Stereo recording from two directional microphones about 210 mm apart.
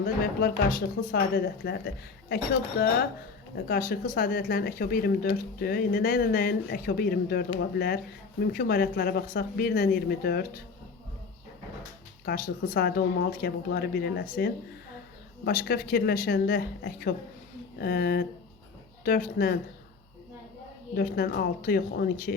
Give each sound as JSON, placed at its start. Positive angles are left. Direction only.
{"t": 0.0, "sound": "speech", "side_deg": 45}
{"t": 12.2, "sound": "speech", "side_deg": 45}
{"t": 20.9, "sound": "speech", "side_deg": 45}